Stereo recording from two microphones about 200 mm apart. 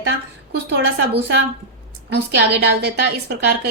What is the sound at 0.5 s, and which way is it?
A woman's voice, 55° right (ahead or behind).